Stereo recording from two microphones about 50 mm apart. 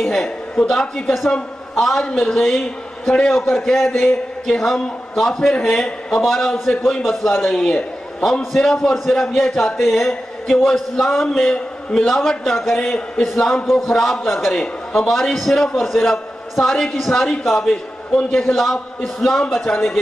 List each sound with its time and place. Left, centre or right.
0.0 s a sound: centre
0.7 s a man's voice: centre
5.9 s a man's voice: centre
6.2 s a man's voice: centre
15.0 s a man's voice: centre